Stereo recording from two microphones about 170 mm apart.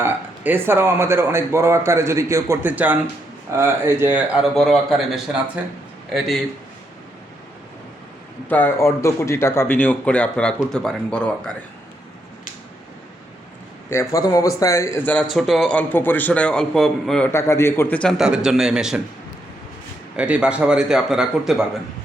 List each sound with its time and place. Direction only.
0.0 s speech: 10° right (ahead or behind)
8.4 s speech: 10° left (ahead or behind)
13.9 s speech: 20° left (ahead or behind)
15.4 s speech: centre (ahead or behind)
17.3 s speech: 15° left (ahead or behind); by 19.0 s 5° right (ahead or behind)
20.1 s speech: 5° right (ahead or behind)